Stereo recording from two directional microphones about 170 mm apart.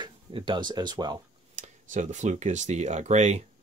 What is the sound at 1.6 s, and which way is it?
Speech, 45° right (ahead or behind).